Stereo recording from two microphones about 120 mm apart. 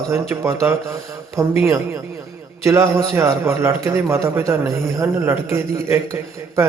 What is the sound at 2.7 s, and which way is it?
A man's voice, 20° right (ahead or behind).